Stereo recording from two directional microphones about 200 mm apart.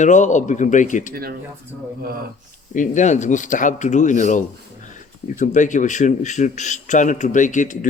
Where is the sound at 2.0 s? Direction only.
50° right (ahead or behind).